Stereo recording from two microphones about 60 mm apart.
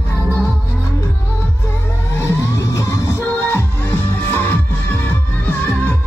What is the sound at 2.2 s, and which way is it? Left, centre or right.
Music, left.